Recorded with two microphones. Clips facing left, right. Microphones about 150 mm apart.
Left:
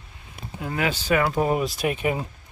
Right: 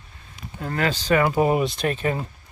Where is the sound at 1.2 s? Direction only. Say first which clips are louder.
Right 3 dB; 5° right (ahead or behind); by 2.3 s 10° left (ahead or behind).